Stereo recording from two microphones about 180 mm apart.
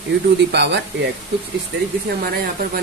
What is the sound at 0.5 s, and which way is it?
Speech, 75° right (ahead or behind).